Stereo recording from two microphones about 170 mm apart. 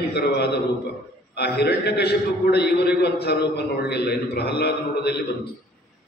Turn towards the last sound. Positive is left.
turn(degrees=75)  # may be behind; listen again after turning